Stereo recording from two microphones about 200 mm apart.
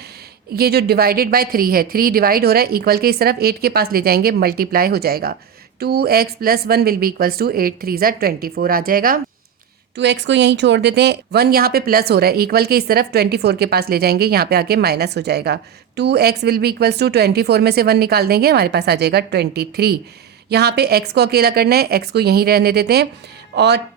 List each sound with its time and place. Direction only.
0.5 s speech: 50° right (ahead or behind)
9.9 s speech: 60° right (ahead or behind)